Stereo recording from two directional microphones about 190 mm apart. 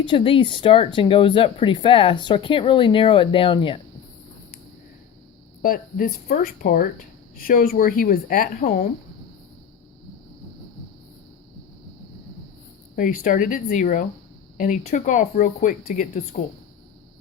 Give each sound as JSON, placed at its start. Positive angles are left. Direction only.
{"t": 0.0, "sound": "speech", "side_deg": 25}
{"t": 5.6, "sound": "speech", "side_deg": 50}
{"t": 13.0, "sound": "speech", "side_deg": 45}